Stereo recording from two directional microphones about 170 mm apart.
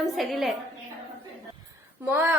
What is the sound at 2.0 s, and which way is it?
Speech, 10° right (ahead or behind).